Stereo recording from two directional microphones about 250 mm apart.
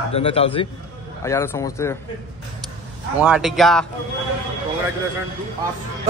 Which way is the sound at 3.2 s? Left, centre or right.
Centre.